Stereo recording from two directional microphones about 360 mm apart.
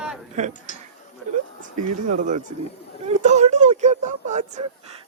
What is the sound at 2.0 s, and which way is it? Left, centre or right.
Speech, right.